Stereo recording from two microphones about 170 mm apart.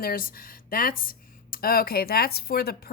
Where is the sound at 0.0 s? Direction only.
60° left (ahead or behind).